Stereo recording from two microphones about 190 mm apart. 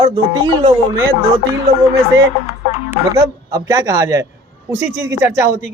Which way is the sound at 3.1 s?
20° right (ahead or behind).